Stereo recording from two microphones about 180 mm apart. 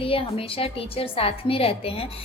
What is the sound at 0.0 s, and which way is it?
A woman's voice, 30° left (ahead or behind).